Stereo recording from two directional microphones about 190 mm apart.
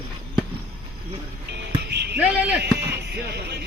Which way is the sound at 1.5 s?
60° right (ahead or behind).